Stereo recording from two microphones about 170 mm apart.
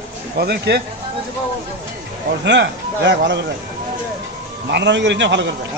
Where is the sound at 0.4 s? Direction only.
70° right (ahead or behind).